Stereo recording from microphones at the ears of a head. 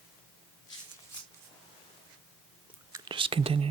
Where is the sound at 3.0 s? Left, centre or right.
Right.